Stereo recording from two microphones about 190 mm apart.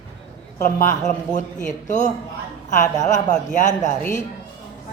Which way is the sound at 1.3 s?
40° left (ahead or behind).